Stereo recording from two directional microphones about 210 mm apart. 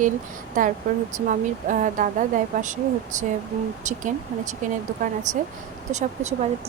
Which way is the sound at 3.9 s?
35° right (ahead or behind).